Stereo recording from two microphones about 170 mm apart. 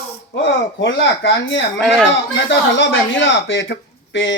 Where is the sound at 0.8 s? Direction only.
90° left.